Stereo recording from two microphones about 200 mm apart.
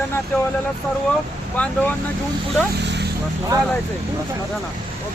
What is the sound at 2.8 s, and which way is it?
Vehicle, 60° right (ahead or behind).